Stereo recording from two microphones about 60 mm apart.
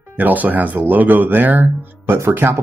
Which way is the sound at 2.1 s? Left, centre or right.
Right.